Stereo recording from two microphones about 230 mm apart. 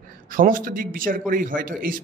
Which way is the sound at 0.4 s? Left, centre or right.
Right.